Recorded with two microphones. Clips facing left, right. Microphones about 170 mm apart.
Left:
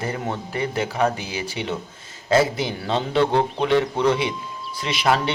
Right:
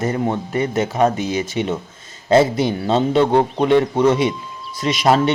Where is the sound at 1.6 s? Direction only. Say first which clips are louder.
Right 6 dB; 40° right (ahead or behind).